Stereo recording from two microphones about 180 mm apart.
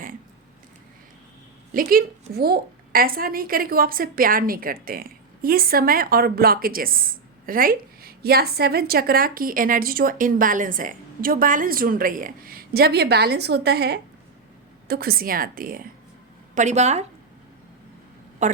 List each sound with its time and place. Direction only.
1.7 s a woman's voice: 50° right (ahead or behind)
16.6 s a woman's voice: 40° right (ahead or behind)
18.4 s a woman's voice: 45° right (ahead or behind)